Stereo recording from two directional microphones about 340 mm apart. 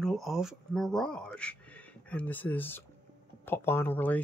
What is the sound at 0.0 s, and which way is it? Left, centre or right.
Speech, centre.